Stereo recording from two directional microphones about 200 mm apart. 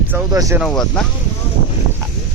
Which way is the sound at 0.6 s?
5° left (ahead or behind).